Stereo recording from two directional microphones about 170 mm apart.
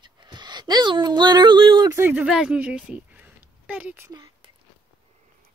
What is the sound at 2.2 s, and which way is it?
Speech, 5° right (ahead or behind).